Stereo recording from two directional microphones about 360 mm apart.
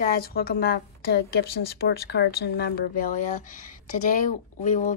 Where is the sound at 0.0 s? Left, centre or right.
Left.